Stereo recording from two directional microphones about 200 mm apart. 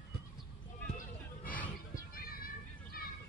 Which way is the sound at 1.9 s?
45° left (ahead or behind).